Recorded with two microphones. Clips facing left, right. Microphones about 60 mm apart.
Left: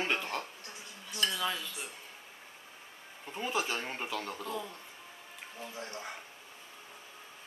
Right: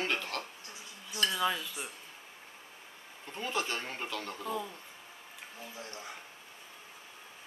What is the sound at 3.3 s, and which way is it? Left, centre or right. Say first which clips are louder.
Speech: left 1 dB; centre.